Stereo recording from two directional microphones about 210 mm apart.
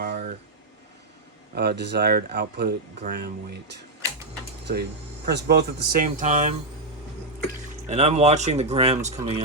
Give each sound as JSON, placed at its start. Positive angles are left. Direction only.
{"t": 0.0, "sound": "a sound", "side_deg": -45}
{"t": 1.5, "sound": "speech", "side_deg": -50}
{"t": 4.7, "sound": "speech", "side_deg": -50}
{"t": 7.9, "sound": "speech", "side_deg": -30}